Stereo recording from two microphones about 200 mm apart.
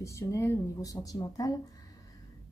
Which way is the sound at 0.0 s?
15° left (ahead or behind).